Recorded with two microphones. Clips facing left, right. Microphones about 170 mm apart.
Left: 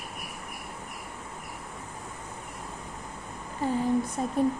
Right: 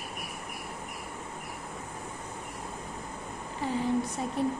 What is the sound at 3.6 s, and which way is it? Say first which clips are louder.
Speech: left 4 dB; 45° left (ahead or behind).